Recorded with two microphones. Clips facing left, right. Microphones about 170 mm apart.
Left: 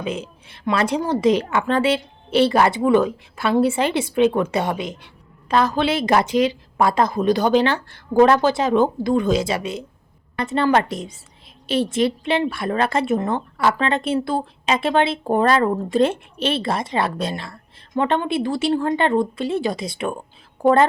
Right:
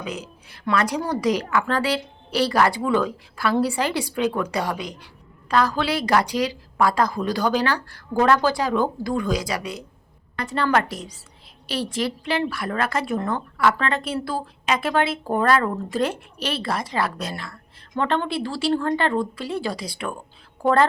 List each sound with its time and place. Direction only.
0.0 s a woman's voice: 25° left (ahead or behind)